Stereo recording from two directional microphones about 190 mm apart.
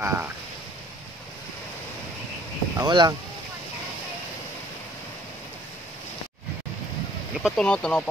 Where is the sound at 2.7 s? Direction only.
20° right (ahead or behind).